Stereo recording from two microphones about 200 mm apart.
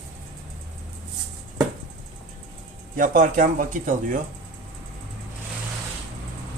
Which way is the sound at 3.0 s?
40° right (ahead or behind).